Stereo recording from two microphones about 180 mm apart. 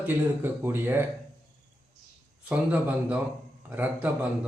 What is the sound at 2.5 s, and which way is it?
Speech, 10° right (ahead or behind).